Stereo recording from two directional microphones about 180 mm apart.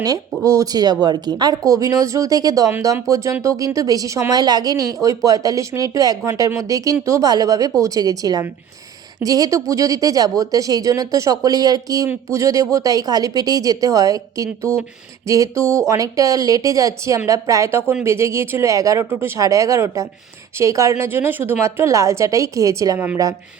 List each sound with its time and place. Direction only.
0.0 s speech: 20° right (ahead or behind)